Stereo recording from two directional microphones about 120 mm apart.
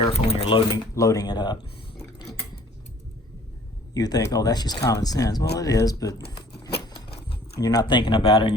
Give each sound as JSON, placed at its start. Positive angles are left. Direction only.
{"t": 0.1, "sound": "speech", "side_deg": 55}
{"t": 0.9, "sound": "speech", "side_deg": 30}
{"t": 3.9, "sound": "speech", "side_deg": 30}
{"t": 7.6, "sound": "speech", "side_deg": 35}